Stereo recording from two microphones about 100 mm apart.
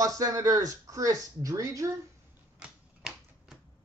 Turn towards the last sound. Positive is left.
turn(degrees=-10)  # may be behind; listen again after turning